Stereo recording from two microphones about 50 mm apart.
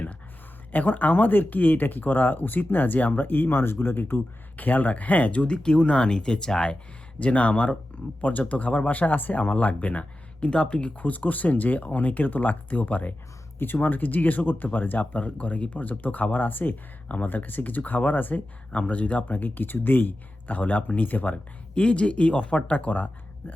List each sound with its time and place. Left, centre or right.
0.7 s speech: left; by 6.7 s centre
7.2 s speech: left
21.8 s speech: left